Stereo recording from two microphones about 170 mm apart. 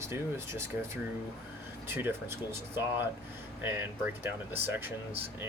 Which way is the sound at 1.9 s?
15° right (ahead or behind).